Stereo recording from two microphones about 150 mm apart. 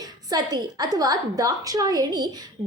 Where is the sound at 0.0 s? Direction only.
25° right (ahead or behind).